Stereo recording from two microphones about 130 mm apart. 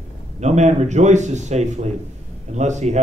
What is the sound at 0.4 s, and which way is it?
A man's voice, 60° right (ahead or behind).